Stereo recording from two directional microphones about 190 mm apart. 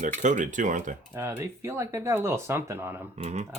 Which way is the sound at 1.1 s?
10° right (ahead or behind).